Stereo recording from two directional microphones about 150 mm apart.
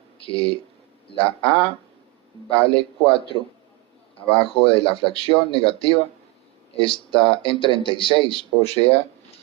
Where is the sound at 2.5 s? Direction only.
40° left (ahead or behind).